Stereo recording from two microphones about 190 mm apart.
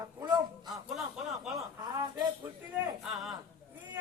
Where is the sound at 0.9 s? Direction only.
Centre (ahead or behind).